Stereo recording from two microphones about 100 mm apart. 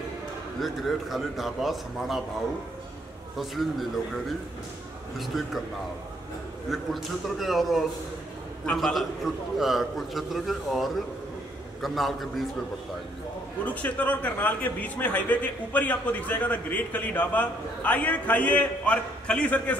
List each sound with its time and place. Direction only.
0.6 s a man's voice: centre (ahead or behind)
3.3 s a man's voice: centre (ahead or behind)
5.2 s a man's voice: centre (ahead or behind)
6.7 s a man's voice: centre (ahead or behind)
13.7 s a man's voice: 15° left (ahead or behind)